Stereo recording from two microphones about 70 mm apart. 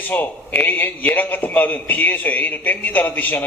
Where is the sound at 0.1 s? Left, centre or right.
Left.